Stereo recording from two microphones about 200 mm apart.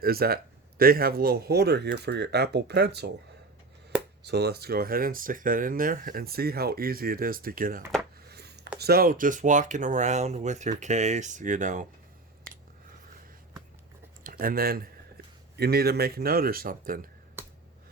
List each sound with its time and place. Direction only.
0.0 s speech: 50° right (ahead or behind)
4.2 s speech: 55° right (ahead or behind)
8.3 s a sound: 55° right (ahead or behind)
8.8 s speech: 50° right (ahead or behind)
14.3 s speech: 45° right (ahead or behind)